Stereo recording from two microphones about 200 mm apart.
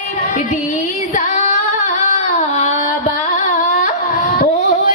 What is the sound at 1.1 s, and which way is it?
Female singing, 35° left (ahead or behind).